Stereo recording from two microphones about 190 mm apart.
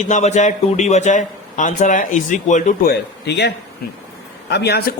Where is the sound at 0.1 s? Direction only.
40° left (ahead or behind).